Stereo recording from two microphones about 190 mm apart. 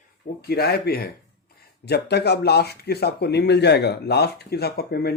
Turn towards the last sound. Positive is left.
turn(degrees=55)  # may be behind; listen again after turning